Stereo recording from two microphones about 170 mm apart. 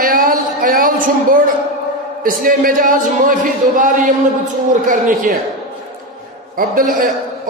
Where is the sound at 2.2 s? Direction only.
55° right (ahead or behind).